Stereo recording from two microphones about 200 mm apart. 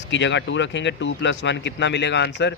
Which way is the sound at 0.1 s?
65° left (ahead or behind).